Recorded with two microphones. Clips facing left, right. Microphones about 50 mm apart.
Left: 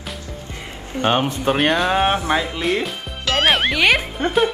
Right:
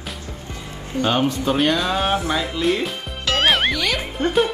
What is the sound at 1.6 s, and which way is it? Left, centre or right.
Speech, left.